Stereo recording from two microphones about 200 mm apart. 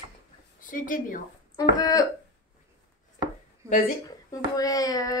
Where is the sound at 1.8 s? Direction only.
20° left (ahead or behind).